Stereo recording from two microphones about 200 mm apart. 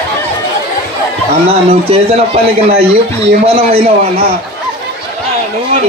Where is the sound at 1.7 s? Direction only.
30° right (ahead or behind).